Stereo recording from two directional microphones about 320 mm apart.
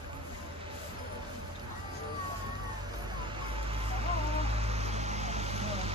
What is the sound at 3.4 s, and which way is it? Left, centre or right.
Vehicle, centre.